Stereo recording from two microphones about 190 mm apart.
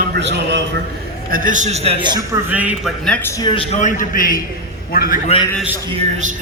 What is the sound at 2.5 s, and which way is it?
Speech, 10° right (ahead or behind).